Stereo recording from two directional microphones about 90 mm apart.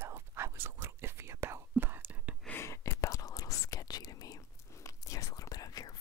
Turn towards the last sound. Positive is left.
turn(degrees=45)  # may be behind; listen again after turning